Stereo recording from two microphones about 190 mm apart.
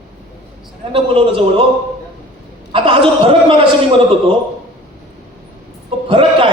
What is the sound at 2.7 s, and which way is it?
Speech, 30° right (ahead or behind).